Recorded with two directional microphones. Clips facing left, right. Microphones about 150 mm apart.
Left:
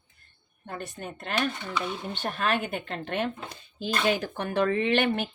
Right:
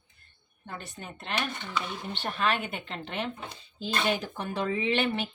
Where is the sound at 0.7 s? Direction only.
50° left (ahead or behind).